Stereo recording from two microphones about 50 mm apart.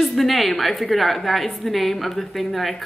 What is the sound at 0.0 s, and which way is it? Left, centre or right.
A woman's voice, centre.